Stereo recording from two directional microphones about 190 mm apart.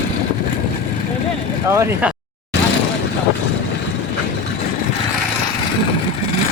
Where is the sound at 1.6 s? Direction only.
15° right (ahead or behind).